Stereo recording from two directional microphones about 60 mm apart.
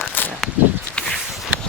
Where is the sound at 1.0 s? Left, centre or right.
Centre.